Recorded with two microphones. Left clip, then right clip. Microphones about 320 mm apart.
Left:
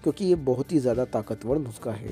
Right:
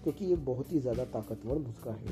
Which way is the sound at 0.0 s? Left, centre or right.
Left.